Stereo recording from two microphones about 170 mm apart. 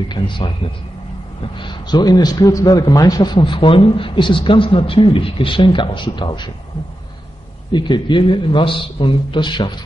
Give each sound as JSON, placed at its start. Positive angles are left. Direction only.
{"t": 0.1, "sound": "a man's voice", "side_deg": 30}
{"t": 7.7, "sound": "a man's voice", "side_deg": 25}